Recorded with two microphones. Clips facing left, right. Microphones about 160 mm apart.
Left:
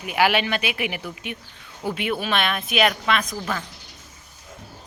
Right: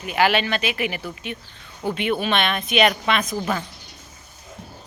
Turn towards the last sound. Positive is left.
turn(degrees=-15)  # may be behind; listen again after turning